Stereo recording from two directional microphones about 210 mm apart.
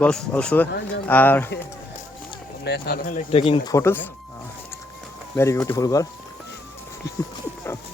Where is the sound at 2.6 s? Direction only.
50° left (ahead or behind); by 3.7 s 25° left (ahead or behind).